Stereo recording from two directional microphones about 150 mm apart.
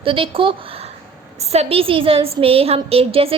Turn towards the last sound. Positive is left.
turn(degrees=-40)  # may be behind; listen again after turning